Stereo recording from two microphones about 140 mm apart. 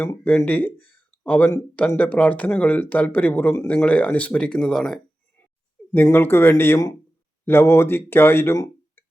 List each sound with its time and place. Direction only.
0.0 s speech: 10° left (ahead or behind)
5.9 s speech: 15° left (ahead or behind)